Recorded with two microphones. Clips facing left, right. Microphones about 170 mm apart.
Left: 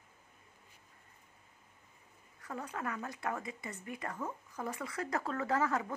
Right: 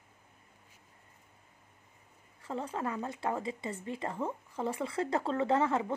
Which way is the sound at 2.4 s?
25° right (ahead or behind).